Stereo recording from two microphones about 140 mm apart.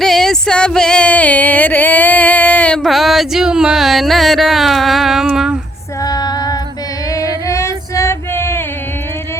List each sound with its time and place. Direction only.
0.0 s music: 5° left (ahead or behind)
6.0 s female singing: 25° left (ahead or behind)
7.1 s music: 25° left (ahead or behind)